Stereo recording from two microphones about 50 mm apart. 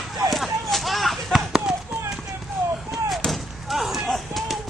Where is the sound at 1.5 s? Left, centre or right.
Centre.